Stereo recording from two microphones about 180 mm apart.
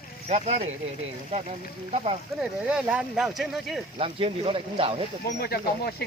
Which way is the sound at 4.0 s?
30° right (ahead or behind).